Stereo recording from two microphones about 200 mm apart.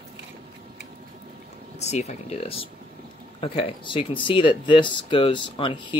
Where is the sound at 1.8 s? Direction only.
35° left (ahead or behind).